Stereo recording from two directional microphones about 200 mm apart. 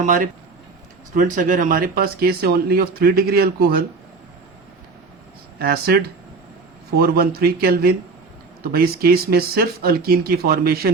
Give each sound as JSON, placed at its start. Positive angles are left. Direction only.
{"t": 0.0, "sound": "speech", "side_deg": -40}
{"t": 5.5, "sound": "speech", "side_deg": -50}